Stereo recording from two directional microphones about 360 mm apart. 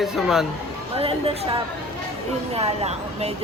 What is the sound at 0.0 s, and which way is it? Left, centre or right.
Speech, centre.